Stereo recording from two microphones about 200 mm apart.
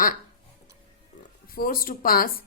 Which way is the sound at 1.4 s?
45° left (ahead or behind).